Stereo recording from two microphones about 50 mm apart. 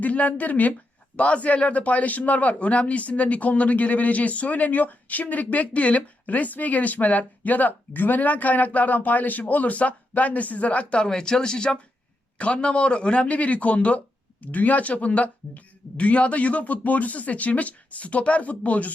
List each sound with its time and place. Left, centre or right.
0.0 s a man's voice: left